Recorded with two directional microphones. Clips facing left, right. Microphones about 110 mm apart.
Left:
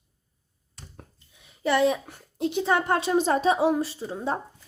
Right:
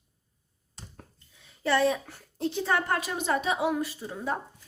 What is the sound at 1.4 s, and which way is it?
A woman's voice, 15° left (ahead or behind).